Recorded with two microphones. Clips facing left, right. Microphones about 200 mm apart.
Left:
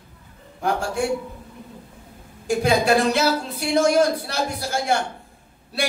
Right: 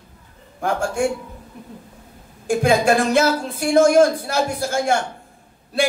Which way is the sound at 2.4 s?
50° right (ahead or behind).